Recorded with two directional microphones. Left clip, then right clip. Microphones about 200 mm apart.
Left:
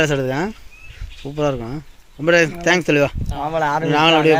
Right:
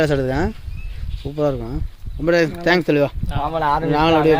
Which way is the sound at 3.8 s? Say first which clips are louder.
Left 3 dB; 5° left (ahead or behind).